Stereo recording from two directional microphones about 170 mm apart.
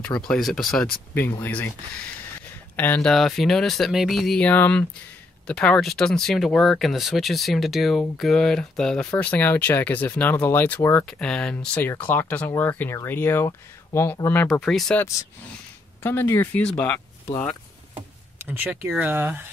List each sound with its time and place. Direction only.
0.2 s speech: centre (ahead or behind)
1.4 s speech: 10° left (ahead or behind)
2.7 s speech: 10° left (ahead or behind)
17.9 s a sound: 10° right (ahead or behind)
18.9 s speech: 10° right (ahead or behind)